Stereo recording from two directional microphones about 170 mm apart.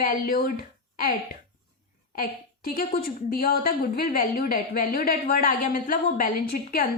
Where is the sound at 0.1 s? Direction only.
60° left (ahead or behind).